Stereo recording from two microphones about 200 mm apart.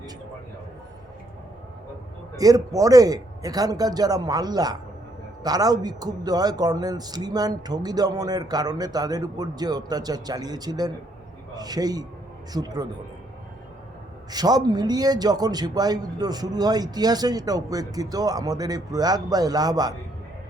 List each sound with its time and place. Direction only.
2.4 s a man's voice: 15° right (ahead or behind)
14.3 s a man's voice: 20° right (ahead or behind)